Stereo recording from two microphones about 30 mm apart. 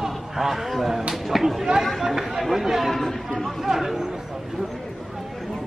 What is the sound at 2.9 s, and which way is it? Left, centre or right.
Speech, centre.